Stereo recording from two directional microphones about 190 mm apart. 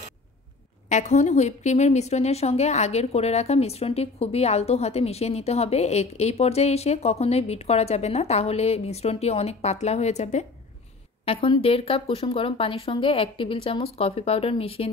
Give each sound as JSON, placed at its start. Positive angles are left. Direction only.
{"t": 0.8, "sound": "a woman's voice", "side_deg": 40}